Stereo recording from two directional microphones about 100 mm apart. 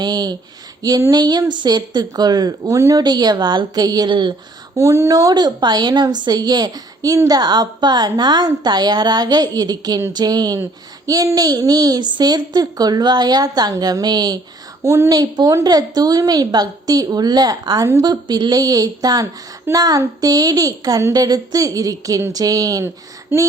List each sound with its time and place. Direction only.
0.0 s a woman's voice: 45° right (ahead or behind)
3.0 s a woman's voice: 45° right (ahead or behind)
4.8 s a woman's voice: 30° right (ahead or behind)
14.8 s a woman's voice: 25° right (ahead or behind)
15.1 s speech: 40° right (ahead or behind)
23.3 s a woman's voice: 20° right (ahead or behind)